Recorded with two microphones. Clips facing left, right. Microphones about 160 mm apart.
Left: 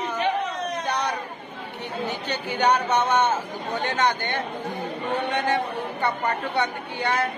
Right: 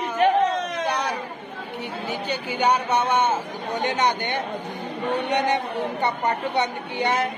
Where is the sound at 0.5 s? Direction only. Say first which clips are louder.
Right 2 dB; 90° right.